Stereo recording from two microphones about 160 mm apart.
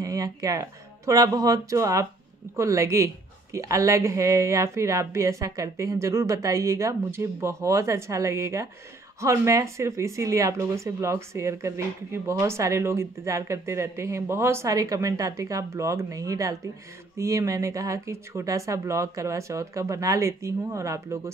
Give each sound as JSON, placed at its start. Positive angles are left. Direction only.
{"t": 0.0, "sound": "a woman's voice", "side_deg": -20}